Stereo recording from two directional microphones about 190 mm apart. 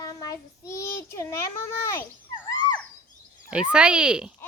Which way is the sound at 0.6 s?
15° left (ahead or behind).